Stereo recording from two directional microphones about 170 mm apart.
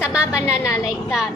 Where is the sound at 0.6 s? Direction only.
20° left (ahead or behind).